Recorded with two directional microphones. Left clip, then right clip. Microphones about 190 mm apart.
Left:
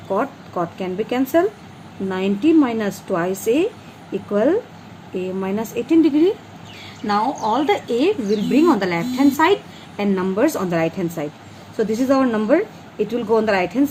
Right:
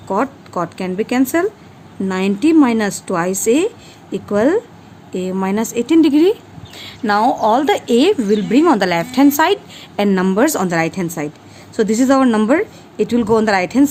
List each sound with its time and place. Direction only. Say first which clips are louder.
0.2 s a woman's voice: right 3 dB; 65° right (ahead or behind)